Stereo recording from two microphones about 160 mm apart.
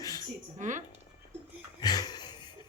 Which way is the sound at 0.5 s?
50° right (ahead or behind).